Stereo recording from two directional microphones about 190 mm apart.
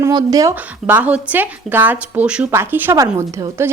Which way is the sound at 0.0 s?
20° right (ahead or behind).